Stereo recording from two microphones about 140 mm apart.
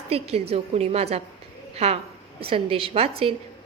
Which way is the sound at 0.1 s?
45° right (ahead or behind).